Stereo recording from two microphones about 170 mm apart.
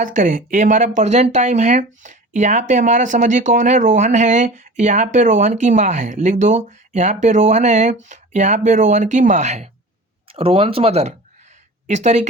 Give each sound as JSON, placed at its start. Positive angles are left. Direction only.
{"t": 0.0, "sound": "speech", "side_deg": -50}